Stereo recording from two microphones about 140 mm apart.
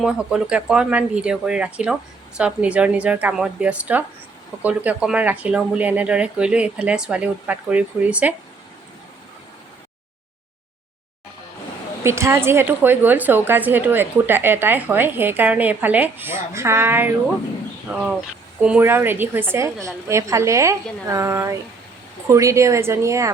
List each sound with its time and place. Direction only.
0.0 s a woman's voice: 5° right (ahead or behind)
12.0 s a woman's voice: 20° right (ahead or behind)
18.6 s a woman's voice: 10° right (ahead or behind)